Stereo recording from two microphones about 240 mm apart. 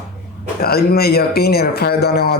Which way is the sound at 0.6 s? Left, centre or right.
Left.